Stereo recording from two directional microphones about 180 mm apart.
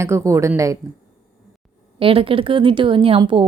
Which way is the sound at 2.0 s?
30° right (ahead or behind).